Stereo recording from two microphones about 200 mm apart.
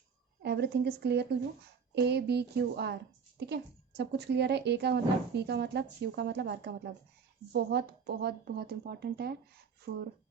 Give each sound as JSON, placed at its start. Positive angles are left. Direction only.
{"t": 0.4, "sound": "a woman's voice", "side_deg": -55}